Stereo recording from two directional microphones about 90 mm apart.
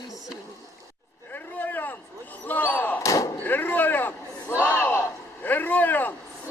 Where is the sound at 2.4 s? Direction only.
20° left (ahead or behind).